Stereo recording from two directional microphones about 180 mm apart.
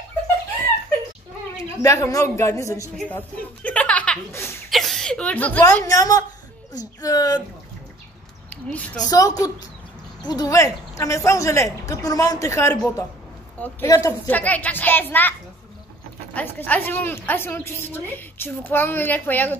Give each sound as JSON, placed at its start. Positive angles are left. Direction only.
{"t": 1.6, "sound": "a woman's voice", "side_deg": 20}
{"t": 4.6, "sound": "speech", "side_deg": 0}
{"t": 8.5, "sound": "speech", "side_deg": 5}
{"t": 9.1, "sound": "a woman's voice", "side_deg": 20}
{"t": 16.3, "sound": "a woman's voice", "side_deg": 10}